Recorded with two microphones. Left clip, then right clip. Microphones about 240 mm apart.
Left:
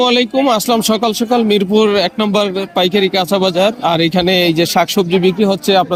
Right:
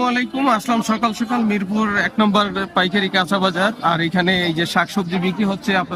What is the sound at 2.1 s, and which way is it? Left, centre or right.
A man's voice, centre.